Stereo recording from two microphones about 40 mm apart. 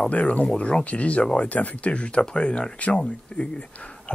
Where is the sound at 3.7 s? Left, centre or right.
Left.